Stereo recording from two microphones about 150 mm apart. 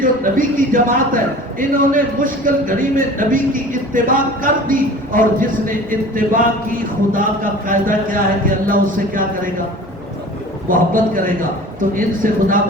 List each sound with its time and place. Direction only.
0.0 s speech: 65° right (ahead or behind)
10.7 s a man's voice: 65° right (ahead or behind)